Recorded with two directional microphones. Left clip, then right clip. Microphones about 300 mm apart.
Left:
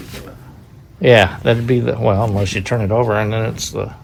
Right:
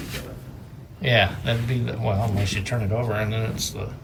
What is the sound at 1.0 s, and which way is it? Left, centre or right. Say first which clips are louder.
Speech: left 10 dB; centre.